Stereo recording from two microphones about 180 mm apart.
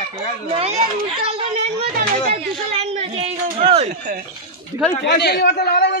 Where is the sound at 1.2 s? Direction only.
30° right (ahead or behind).